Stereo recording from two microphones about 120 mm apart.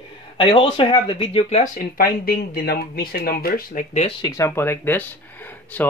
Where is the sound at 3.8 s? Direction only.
90° left.